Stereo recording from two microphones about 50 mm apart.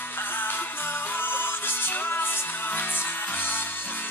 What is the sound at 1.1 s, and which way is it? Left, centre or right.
Music, left.